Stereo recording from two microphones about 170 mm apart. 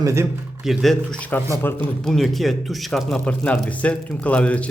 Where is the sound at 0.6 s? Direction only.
Centre (ahead or behind).